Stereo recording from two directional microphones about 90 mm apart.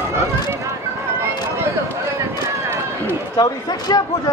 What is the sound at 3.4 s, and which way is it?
Speech, 45° left (ahead or behind).